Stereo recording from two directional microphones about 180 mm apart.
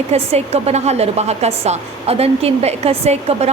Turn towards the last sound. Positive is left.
turn(degrees=-35)  # may be behind; listen again after turning